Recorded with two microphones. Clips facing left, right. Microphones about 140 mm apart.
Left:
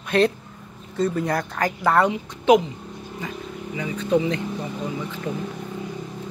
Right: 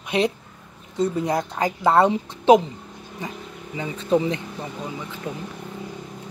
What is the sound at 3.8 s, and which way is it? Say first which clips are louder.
Speech: even; 25° right (ahead or behind).